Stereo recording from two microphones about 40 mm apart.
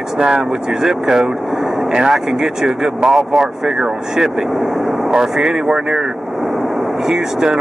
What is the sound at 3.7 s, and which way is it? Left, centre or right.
Speech, centre.